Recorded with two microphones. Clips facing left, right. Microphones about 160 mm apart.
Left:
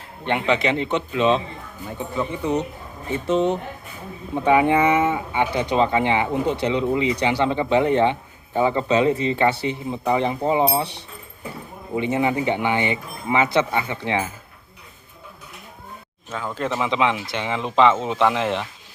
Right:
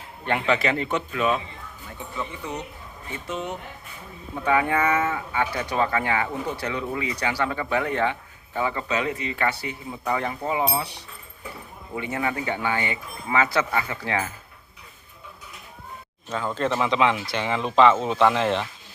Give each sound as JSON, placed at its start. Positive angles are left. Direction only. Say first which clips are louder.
{"t": 0.3, "sound": "speech", "louder": "left 2 dB", "side_deg": 20}
{"t": 16.3, "sound": "speech", "louder": "right 1 dB", "side_deg": 5}